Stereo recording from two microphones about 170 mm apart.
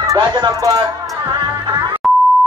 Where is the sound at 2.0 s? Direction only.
Centre (ahead or behind).